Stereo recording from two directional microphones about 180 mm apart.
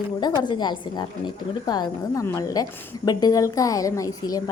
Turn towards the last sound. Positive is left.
turn(degrees=20)  # may be behind; listen again after turning